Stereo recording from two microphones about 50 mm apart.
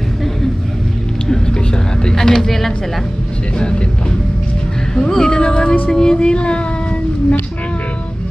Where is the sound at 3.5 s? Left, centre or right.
Centre.